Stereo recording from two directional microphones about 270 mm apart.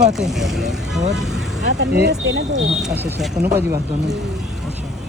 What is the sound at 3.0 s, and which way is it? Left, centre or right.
Speech, centre.